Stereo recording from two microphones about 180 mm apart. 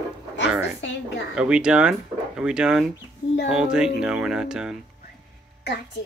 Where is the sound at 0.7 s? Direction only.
90° left.